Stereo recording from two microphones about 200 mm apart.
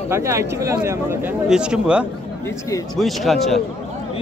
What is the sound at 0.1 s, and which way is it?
Speech, 15° right (ahead or behind).